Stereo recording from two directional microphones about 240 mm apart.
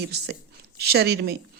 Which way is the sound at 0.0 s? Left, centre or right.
Right.